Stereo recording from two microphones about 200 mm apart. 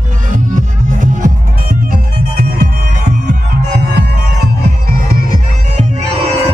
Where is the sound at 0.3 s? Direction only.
40° right (ahead or behind).